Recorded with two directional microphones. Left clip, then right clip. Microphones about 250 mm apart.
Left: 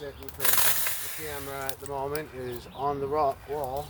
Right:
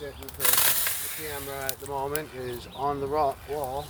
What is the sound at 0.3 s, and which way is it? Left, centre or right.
Speech, centre.